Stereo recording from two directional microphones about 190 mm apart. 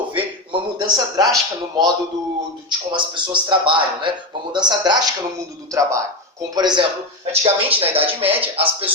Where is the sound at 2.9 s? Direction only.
25° right (ahead or behind).